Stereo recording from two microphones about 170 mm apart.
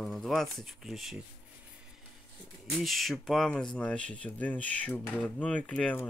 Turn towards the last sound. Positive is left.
turn(degrees=5)  # may be behind; listen again after turning